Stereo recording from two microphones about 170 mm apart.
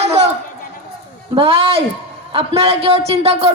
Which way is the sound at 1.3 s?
35° right (ahead or behind).